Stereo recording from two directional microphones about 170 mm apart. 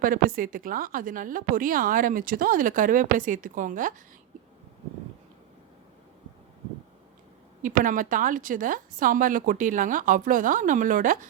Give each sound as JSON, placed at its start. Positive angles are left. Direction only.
{"t": 0.0, "sound": "a woman's voice", "side_deg": -55}
{"t": 7.6, "sound": "a woman's voice", "side_deg": -50}